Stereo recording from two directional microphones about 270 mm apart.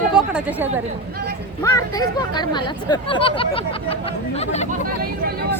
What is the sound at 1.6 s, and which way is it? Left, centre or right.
Speech, centre.